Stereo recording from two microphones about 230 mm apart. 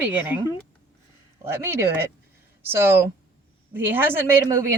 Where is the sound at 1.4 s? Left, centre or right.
Centre.